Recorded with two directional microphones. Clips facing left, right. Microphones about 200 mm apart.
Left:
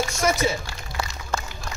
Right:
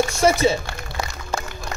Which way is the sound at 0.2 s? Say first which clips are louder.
Right 5 dB; 30° right (ahead or behind).